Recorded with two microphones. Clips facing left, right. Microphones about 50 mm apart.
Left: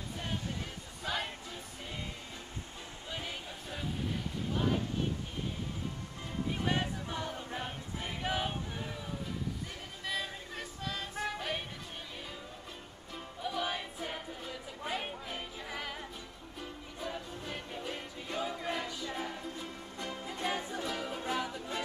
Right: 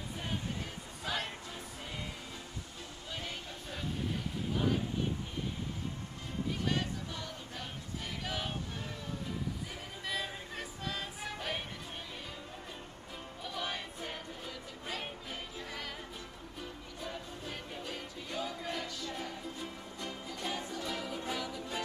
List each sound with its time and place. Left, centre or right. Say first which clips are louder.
1.0 s a sound: left 1 dB; centre
3.1 s a sound: left 1 dB; centre
6.6 s choir: left 3 dB; left
10.0 s music: left 1 dB; centre
13.4 s music: left 4 dB; centre
20.4 s music: left 3 dB; left
20.8 s music: left 1 dB; centre